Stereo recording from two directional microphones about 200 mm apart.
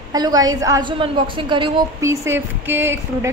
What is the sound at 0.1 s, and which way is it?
A woman's voice, 20° right (ahead or behind).